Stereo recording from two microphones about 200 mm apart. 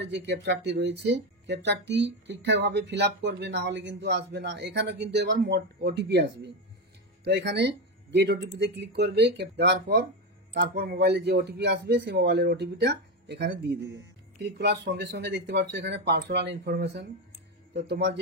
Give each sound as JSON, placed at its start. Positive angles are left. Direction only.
{"t": 0.0, "sound": "speech", "side_deg": -60}